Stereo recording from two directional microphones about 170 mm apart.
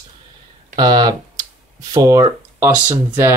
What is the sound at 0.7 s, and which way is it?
Speech, 25° right (ahead or behind).